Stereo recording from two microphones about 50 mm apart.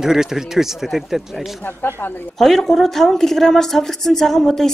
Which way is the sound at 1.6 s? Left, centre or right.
Left.